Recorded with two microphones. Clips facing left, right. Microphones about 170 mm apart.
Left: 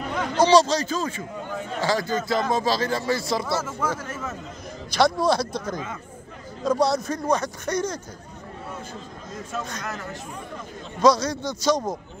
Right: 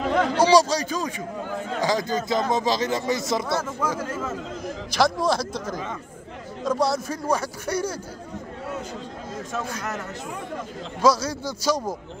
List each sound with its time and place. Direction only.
0.4 s speech: 10° right (ahead or behind)
4.6 s a man's voice: centre (ahead or behind)
11.0 s speech: 5° right (ahead or behind)